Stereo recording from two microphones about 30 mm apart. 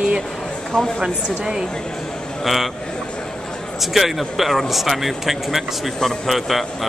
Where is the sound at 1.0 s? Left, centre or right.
Right.